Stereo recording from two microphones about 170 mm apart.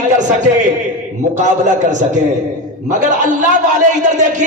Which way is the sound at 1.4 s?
45° right (ahead or behind).